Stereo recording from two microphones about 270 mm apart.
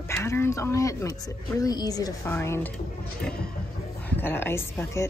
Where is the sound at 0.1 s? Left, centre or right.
Centre.